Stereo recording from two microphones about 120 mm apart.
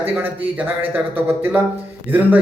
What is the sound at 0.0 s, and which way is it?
A man's voice, 20° right (ahead or behind).